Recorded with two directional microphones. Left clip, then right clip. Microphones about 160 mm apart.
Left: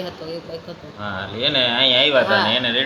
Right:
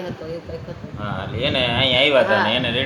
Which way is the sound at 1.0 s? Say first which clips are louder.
Left 2 dB; 10° right (ahead or behind).